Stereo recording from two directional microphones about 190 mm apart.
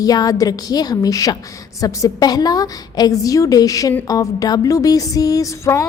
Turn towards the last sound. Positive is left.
turn(degrees=15)  # may be behind; listen again after turning